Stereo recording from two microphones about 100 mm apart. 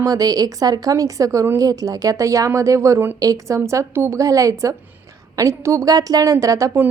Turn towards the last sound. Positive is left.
turn(degrees=-35)  # may be behind; listen again after turning